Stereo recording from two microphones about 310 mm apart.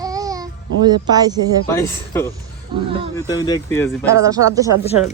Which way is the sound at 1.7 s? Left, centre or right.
Centre.